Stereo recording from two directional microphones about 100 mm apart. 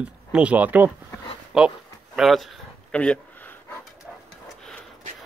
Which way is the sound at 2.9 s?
10° left (ahead or behind).